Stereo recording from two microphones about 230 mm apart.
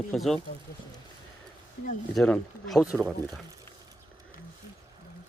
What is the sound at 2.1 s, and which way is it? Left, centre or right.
Speech, centre.